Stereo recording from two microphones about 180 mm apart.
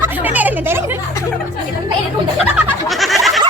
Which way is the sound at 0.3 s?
10° right (ahead or behind).